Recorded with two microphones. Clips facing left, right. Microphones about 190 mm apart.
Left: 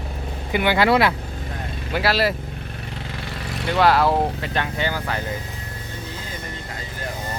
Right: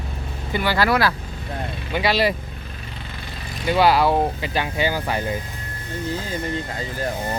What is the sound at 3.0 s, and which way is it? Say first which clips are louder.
Vehicle: left 5 dB; 70° left (ahead or behind).